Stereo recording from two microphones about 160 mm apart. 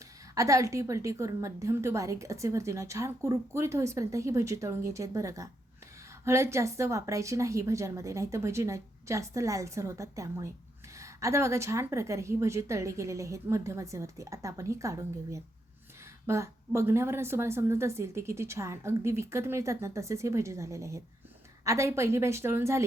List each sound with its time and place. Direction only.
0.3 s a woman's voice: 20° right (ahead or behind)